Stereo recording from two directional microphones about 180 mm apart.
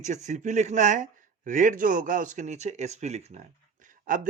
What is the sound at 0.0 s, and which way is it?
Speech, 40° right (ahead or behind).